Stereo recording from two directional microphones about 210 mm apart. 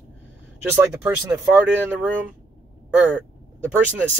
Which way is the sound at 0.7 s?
10° right (ahead or behind).